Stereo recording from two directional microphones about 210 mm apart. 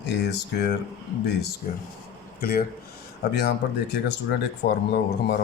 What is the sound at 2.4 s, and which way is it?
Speech, 45° left (ahead or behind).